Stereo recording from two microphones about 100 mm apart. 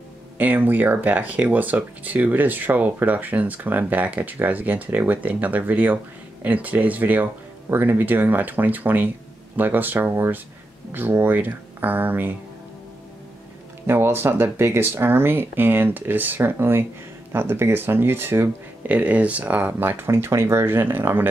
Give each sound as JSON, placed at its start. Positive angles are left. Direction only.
{"t": 0.4, "sound": "speech", "side_deg": -15}
{"t": 13.8, "sound": "speech", "side_deg": -20}